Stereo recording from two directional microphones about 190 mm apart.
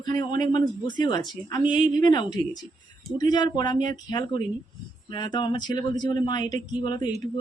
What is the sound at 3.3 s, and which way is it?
Speech, 25° left (ahead or behind).